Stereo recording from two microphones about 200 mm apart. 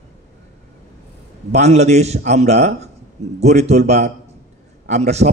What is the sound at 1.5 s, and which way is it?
A man's voice, 35° right (ahead or behind).